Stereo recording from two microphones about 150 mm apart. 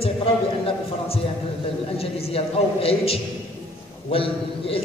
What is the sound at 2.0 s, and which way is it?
A man's voice, 40° left (ahead or behind).